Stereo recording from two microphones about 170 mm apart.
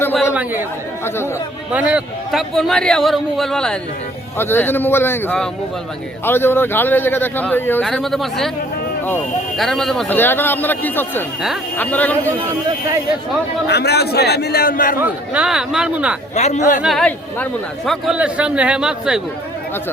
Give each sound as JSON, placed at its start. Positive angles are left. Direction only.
{"t": 1.7, "sound": "a man's voice", "side_deg": -5}
{"t": 7.9, "sound": "speech", "side_deg": 0}
{"t": 9.6, "sound": "a man's voice", "side_deg": 0}
{"t": 13.7, "sound": "a man's voice", "side_deg": 75}
{"t": 15.0, "sound": "speech", "side_deg": -5}
{"t": 16.3, "sound": "a man's voice", "side_deg": 40}
{"t": 16.8, "sound": "speech", "side_deg": 0}